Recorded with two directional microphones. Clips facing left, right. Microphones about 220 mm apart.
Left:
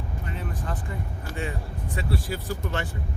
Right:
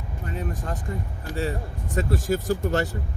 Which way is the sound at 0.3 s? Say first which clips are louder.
Right 4 dB; 45° right (ahead or behind).